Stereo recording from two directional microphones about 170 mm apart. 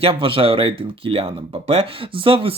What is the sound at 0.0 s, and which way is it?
Speech, 30° right (ahead or behind).